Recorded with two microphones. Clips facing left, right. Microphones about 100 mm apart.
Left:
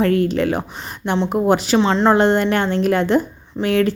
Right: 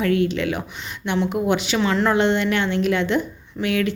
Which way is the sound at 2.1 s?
40° left (ahead or behind).